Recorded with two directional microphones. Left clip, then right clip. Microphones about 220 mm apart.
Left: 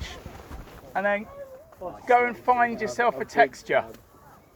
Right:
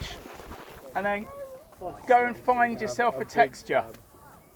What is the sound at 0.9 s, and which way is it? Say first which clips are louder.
Speech: left 3 dB; 45° left (ahead or behind).